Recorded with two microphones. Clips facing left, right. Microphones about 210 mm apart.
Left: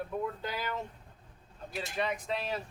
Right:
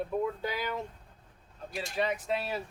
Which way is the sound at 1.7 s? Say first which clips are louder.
Right 2 dB; centre (ahead or behind).